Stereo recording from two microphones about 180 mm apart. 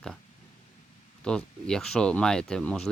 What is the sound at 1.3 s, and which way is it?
Speech, 5° left (ahead or behind).